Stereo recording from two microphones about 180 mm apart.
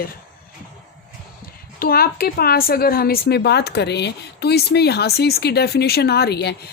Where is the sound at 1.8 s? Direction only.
55° left (ahead or behind).